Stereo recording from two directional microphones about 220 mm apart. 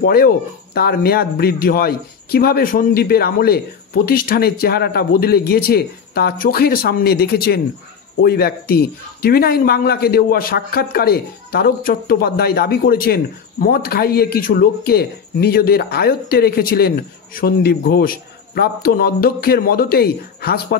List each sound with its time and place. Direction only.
0.0 s speech: 45° left (ahead or behind)